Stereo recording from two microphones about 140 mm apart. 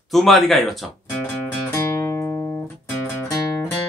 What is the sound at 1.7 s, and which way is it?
Music, 20° left (ahead or behind).